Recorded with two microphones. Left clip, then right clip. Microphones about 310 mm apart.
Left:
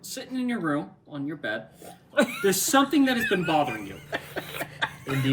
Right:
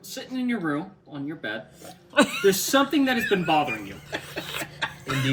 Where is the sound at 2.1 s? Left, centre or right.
Right.